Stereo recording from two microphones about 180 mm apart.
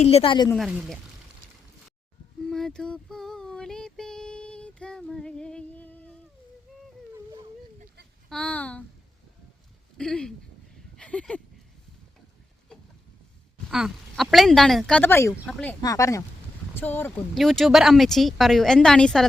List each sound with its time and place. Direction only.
0.0 s speech: 35° left (ahead or behind)
0.5 s speech: 5° right (ahead or behind)
2.5 s female singing: centre (ahead or behind)
8.3 s a sound: 5° left (ahead or behind)
10.0 s speech: 5° left (ahead or behind)
10.9 s a sound: 5° left (ahead or behind)
13.7 s speech: centre (ahead or behind); by 15.4 s 15° left (ahead or behind)
15.4 s speech: 5° left (ahead or behind)
15.8 s speech: 20° left (ahead or behind); by 19.3 s 5° left (ahead or behind)